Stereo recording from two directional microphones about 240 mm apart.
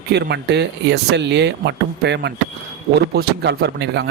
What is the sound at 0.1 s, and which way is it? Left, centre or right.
Speech, right.